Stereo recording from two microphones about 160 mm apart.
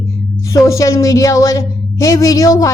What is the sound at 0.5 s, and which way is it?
A woman's voice, 20° left (ahead or behind).